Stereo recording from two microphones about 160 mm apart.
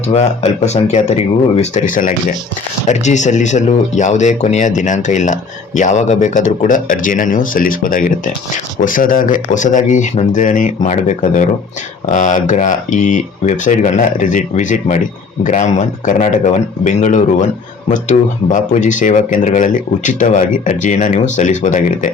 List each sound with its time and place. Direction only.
0.1 s speech: 45° left (ahead or behind)
1.7 s speech: 55° left (ahead or behind)
2.8 s speech: 45° left (ahead or behind)